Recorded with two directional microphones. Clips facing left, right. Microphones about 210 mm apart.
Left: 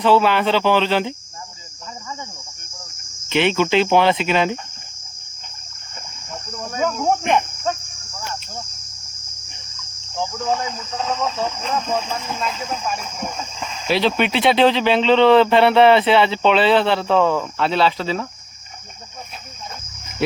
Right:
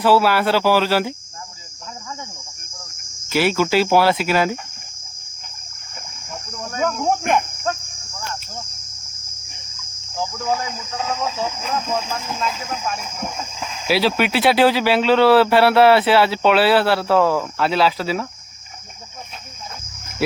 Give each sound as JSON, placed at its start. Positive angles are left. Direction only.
{"t": 0.0, "sound": "speech", "side_deg": -5}
{"t": 3.2, "sound": "speech", "side_deg": -5}
{"t": 6.3, "sound": "cricket", "side_deg": 0}
{"t": 10.2, "sound": "speech", "side_deg": -5}